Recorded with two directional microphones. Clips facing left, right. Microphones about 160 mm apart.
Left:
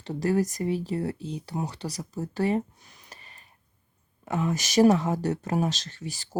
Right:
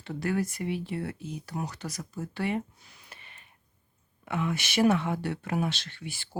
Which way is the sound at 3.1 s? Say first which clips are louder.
Left 2 dB; 40° left (ahead or behind).